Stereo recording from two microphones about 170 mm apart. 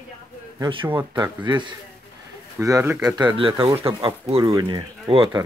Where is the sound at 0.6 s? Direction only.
30° right (ahead or behind); by 3.1 s 15° right (ahead or behind).